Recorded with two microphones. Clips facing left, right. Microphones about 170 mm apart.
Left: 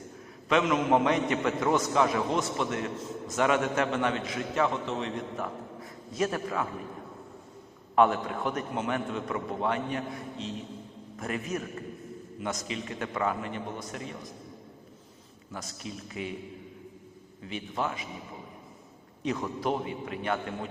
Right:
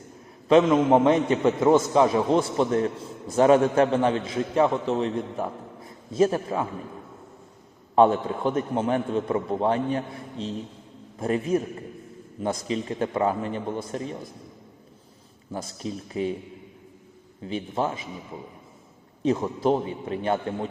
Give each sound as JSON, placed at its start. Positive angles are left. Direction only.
{"t": 0.4, "sound": "a man's voice", "side_deg": -30}
{"t": 7.9, "sound": "a man's voice", "side_deg": -30}
{"t": 15.5, "sound": "a man's voice", "side_deg": -30}
{"t": 17.4, "sound": "a man's voice", "side_deg": -30}
{"t": 19.2, "sound": "a man's voice", "side_deg": -30}